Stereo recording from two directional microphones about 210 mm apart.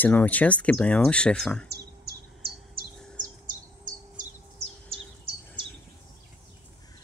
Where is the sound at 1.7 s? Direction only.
50° right (ahead or behind).